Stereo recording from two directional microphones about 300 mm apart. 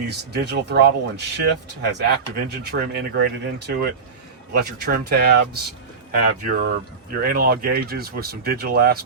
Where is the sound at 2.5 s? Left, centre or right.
Right.